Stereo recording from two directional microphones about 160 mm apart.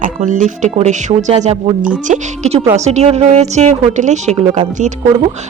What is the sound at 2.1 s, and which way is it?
A woman's voice, 50° right (ahead or behind).